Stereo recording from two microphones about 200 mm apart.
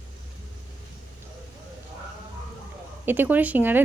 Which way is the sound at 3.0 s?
10° right (ahead or behind).